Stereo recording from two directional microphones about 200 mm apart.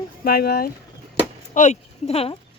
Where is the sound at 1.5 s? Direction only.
35° left (ahead or behind).